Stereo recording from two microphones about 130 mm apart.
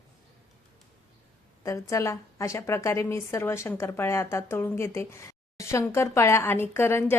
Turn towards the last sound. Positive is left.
turn(degrees=20)  # may be behind; listen again after turning